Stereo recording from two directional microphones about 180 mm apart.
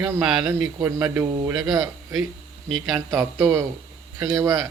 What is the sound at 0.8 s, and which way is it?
Speech, 15° right (ahead or behind).